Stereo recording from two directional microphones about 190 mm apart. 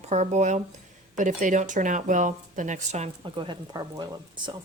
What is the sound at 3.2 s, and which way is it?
Speech, 25° right (ahead or behind).